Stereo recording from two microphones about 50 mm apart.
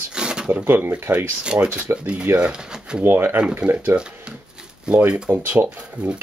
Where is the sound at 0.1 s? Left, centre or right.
Centre.